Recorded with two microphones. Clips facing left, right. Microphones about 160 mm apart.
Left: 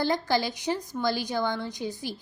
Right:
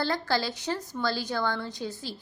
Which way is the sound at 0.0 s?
15° left (ahead or behind).